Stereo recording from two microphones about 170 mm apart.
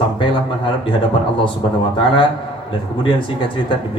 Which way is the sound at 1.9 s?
30° left (ahead or behind).